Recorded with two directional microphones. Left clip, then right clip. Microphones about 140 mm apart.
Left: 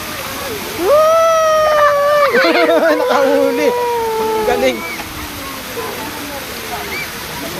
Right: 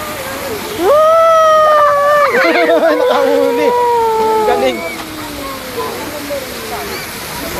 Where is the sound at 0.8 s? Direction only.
5° left (ahead or behind).